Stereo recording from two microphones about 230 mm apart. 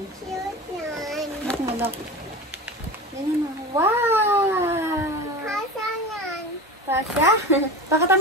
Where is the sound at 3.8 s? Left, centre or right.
Centre.